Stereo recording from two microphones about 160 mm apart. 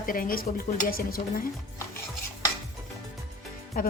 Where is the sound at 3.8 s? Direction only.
55° left (ahead or behind).